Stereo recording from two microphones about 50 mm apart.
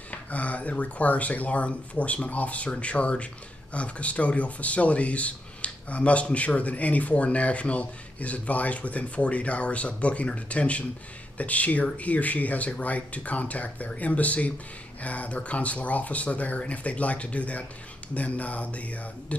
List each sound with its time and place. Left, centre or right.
0.1 s speech: left